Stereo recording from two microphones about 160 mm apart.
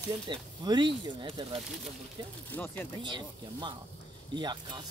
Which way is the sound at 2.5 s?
15° left (ahead or behind).